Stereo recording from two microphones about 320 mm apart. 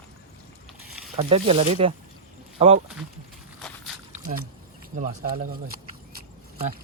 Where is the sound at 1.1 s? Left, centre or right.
Centre.